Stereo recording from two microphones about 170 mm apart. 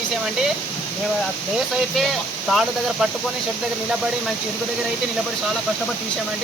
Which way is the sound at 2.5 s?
Centre (ahead or behind).